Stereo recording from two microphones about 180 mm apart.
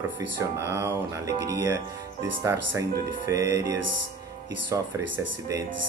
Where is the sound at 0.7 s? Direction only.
15° right (ahead or behind).